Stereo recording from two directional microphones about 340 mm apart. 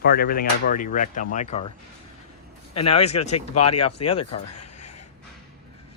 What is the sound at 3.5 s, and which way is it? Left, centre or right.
Speech, left.